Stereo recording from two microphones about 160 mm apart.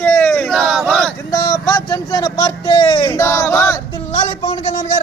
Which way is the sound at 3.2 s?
20° left (ahead or behind).